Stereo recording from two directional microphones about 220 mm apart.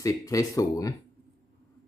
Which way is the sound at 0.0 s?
15° left (ahead or behind).